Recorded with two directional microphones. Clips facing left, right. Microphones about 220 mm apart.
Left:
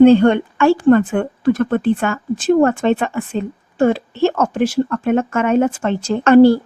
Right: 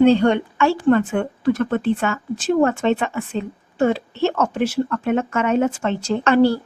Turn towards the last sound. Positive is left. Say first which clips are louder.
# left 7 dB
turn(degrees=45)  # may be behind; listen again after turning